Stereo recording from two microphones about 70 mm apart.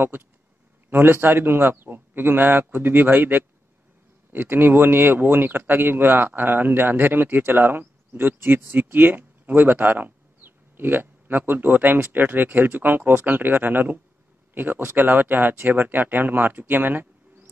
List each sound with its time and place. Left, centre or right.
0.8 s a man's voice: right